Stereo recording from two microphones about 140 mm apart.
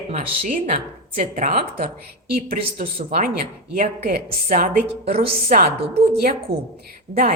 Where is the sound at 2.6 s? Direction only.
40° right (ahead or behind).